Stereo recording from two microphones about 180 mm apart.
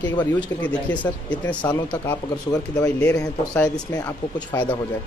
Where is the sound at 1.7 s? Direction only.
20° left (ahead or behind).